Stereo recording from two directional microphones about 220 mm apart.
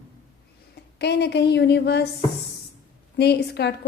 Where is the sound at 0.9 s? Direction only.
50° left (ahead or behind).